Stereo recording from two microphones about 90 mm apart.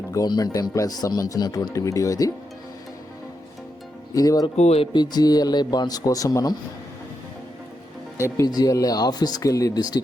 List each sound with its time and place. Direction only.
0.1 s speech: 45° left (ahead or behind)
4.1 s speech: 40° left (ahead or behind)
4.4 s speech: 60° left (ahead or behind); by 6.5 s 40° left (ahead or behind)
8.4 s speech: 45° left (ahead or behind)